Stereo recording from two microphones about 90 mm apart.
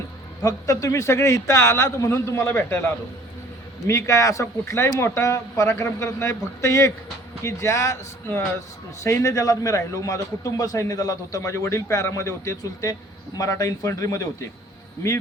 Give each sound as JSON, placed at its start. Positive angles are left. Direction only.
{"t": 0.4, "sound": "a man's voice", "side_deg": 35}